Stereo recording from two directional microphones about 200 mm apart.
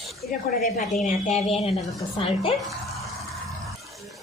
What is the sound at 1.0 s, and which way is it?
A woman's voice, 35° left (ahead or behind).